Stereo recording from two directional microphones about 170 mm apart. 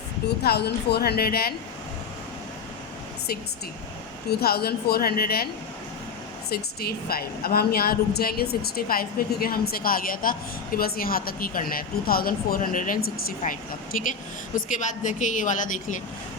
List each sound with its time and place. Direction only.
0.3 s a woman's voice: 75° left (ahead or behind)
4.3 s a woman's voice: 65° left (ahead or behind)
6.5 s a woman's voice: 65° left (ahead or behind); by 16.0 s 50° left (ahead or behind)